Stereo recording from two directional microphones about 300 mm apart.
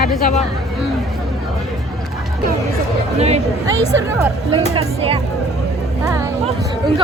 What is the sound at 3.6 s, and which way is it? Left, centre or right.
Speech, centre.